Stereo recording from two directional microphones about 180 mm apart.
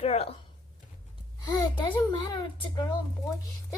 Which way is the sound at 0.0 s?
35° left (ahead or behind).